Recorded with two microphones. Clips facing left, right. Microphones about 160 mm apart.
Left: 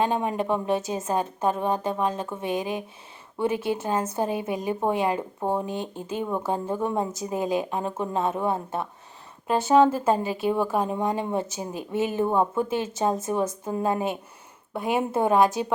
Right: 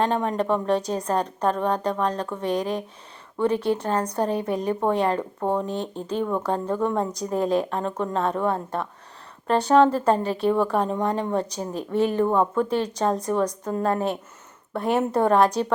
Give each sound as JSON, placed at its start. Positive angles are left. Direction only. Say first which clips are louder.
{"t": 0.0, "sound": "a woman's voice", "louder": "right 2 dB", "side_deg": 10}